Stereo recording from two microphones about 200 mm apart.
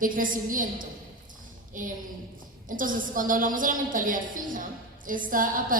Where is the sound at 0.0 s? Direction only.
45° right (ahead or behind).